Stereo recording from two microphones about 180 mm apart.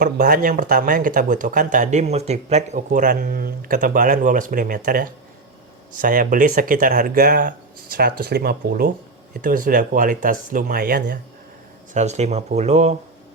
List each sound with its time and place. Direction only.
0.0 s speech: 50° right (ahead or behind)
11.9 s speech: 40° right (ahead or behind)